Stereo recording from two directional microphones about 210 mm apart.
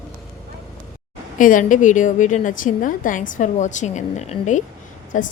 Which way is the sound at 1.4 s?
40° left (ahead or behind).